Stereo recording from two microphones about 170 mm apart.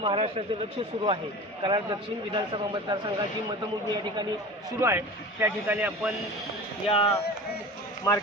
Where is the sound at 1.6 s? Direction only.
30° right (ahead or behind).